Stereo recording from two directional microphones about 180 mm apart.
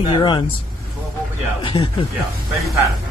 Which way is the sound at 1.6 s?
30° left (ahead or behind).